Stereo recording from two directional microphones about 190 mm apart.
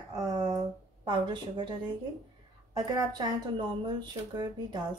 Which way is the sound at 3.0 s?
20° right (ahead or behind).